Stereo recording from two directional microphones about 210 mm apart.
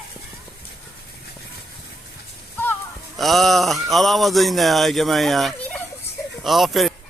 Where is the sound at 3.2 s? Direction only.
Centre (ahead or behind).